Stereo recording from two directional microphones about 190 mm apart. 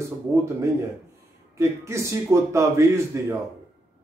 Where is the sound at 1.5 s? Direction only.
15° right (ahead or behind).